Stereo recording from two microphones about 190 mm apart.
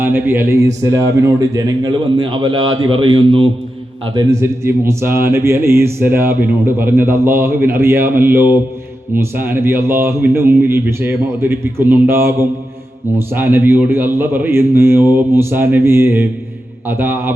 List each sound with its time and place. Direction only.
0.0 s a man's voice: 10° right (ahead or behind)